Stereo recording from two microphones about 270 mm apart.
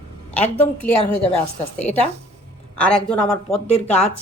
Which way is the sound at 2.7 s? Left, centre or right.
Centre.